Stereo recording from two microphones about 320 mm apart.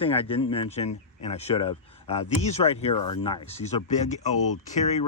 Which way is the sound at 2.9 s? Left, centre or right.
Left.